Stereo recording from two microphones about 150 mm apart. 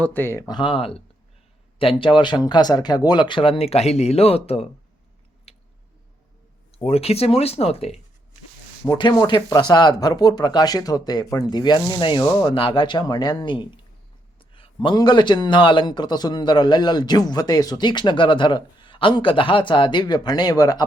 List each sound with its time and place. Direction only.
0.0 s a man's voice: 10° left (ahead or behind); by 4.6 s 40° left (ahead or behind)
5.5 s a sound: 40° left (ahead or behind)
6.7 s speech: 40° left (ahead or behind)
9.0 s a man's voice: 30° left (ahead or behind)